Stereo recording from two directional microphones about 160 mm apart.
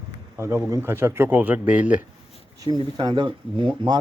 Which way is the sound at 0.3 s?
15° right (ahead or behind).